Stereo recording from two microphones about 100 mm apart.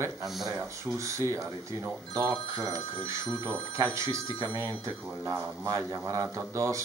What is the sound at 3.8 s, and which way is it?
Speech, 30° right (ahead or behind).